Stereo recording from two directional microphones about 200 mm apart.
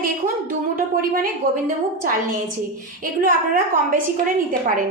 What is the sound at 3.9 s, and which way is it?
Speech, 45° right (ahead or behind).